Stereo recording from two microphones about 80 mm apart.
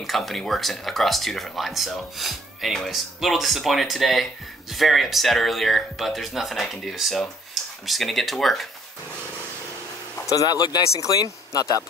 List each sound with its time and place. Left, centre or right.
0.0 s speech: centre
10.2 s speech: left